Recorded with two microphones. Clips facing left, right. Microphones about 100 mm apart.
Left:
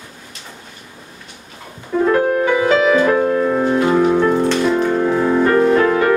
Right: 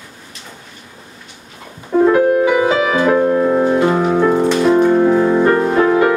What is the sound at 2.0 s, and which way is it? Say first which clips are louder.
Music: right 4 dB; 10° right (ahead or behind).